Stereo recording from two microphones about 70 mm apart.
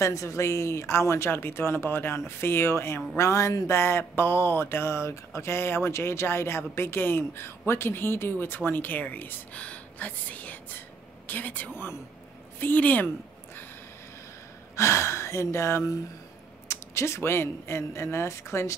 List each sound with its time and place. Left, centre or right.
0.0 s speech: left
9.6 s a sound: left
11.2 s speech: left
11.7 s speech: left
12.5 s a woman's voice: left
14.8 s speech: left